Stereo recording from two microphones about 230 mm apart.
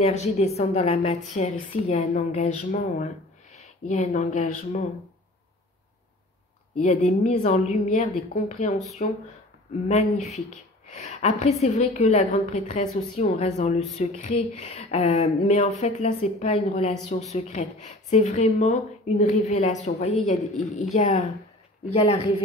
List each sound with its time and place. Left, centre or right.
0.0 s a woman's voice: left
6.8 s a woman's voice: left
9.8 s a woman's voice: left